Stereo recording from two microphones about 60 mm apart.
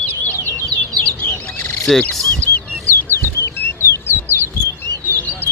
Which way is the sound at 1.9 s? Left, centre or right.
Centre.